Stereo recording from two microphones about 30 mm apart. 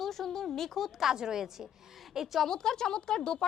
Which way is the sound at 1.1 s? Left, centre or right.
Centre.